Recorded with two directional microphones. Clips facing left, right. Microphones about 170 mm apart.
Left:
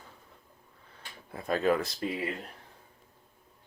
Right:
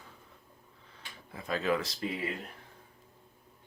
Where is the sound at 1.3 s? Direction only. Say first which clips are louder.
Left 4 dB; 50° left (ahead or behind).